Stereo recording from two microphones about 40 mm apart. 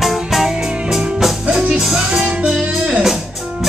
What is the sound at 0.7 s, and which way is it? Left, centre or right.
Music, centre.